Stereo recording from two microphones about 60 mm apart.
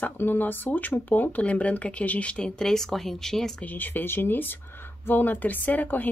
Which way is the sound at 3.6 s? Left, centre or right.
Left.